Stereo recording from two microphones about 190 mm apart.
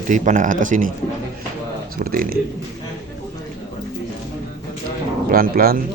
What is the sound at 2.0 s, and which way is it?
Speech, 50° right (ahead or behind).